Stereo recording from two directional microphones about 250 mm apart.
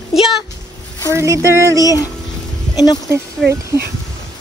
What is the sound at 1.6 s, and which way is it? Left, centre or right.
Speech, centre.